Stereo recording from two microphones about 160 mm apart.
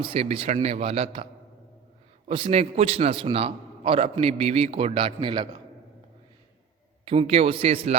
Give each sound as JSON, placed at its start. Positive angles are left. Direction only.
{"t": 0.0, "sound": "a man's voice", "side_deg": -35}
{"t": 7.0, "sound": "a man's voice", "side_deg": -35}